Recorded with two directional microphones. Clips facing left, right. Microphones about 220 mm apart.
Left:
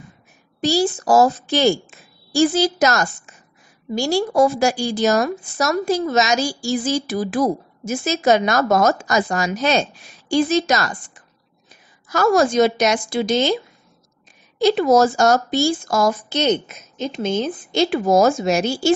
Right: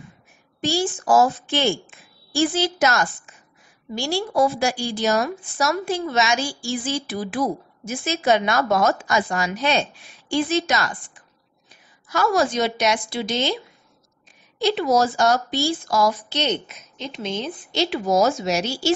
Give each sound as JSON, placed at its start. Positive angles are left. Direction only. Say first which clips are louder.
{"t": 0.6, "sound": "a woman's voice", "louder": "left 4 dB", "side_deg": 40}
{"t": 14.6, "sound": "a woman's voice", "louder": "left 5 dB", "side_deg": 45}